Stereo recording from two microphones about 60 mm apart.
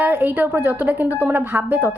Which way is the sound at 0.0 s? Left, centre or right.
Right.